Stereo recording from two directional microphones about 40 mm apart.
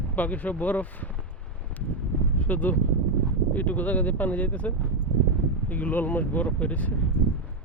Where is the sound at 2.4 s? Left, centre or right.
Left.